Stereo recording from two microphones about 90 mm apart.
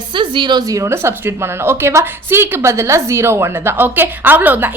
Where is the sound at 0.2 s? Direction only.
60° right (ahead or behind).